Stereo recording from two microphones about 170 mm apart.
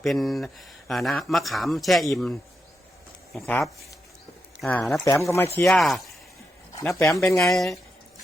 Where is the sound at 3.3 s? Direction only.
10° left (ahead or behind).